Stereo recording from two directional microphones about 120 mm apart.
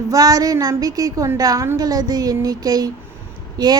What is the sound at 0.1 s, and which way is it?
A woman's voice, 30° right (ahead or behind).